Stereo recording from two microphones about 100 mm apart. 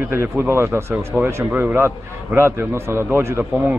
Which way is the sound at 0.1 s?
25° right (ahead or behind).